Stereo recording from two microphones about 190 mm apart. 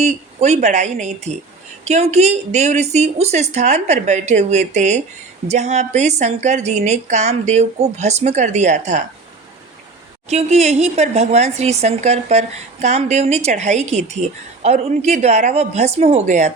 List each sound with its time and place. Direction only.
0.0 s a woman's voice: 35° right (ahead or behind)
10.2 s a woman's voice: 35° right (ahead or behind)